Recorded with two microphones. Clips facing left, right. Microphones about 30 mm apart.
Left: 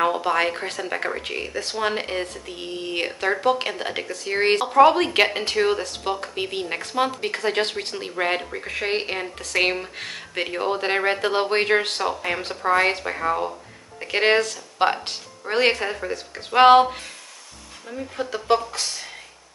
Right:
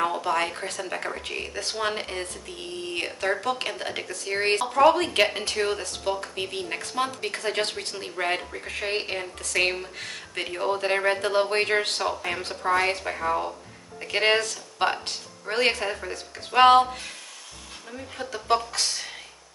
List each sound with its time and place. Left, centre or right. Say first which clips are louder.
0.0 s speech: left 4 dB; left
16.1 s speech: left 5 dB; left
18.1 s speech: left 3 dB; left